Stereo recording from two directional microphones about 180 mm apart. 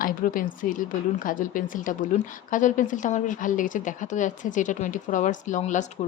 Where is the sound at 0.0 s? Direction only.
50° left (ahead or behind).